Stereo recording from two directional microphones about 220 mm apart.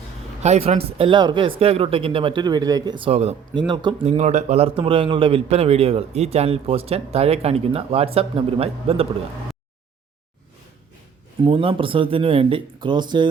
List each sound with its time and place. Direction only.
0.4 s a man's voice: 30° right (ahead or behind)
11.4 s a man's voice: 25° right (ahead or behind)